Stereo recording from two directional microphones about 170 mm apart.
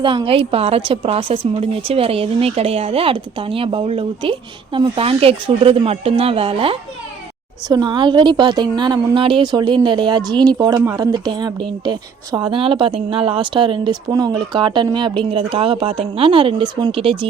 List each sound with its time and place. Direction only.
0.0 s speech: 30° right (ahead or behind)